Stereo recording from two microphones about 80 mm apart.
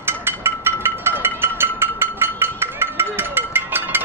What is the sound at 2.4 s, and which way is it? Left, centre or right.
Music, right.